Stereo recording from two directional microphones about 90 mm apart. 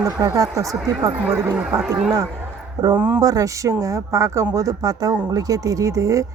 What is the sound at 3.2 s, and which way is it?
Speech, 40° right (ahead or behind).